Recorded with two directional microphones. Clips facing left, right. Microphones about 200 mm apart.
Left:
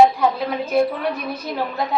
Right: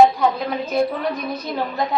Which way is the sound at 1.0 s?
10° left (ahead or behind).